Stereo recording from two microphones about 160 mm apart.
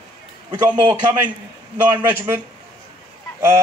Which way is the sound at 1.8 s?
10° right (ahead or behind).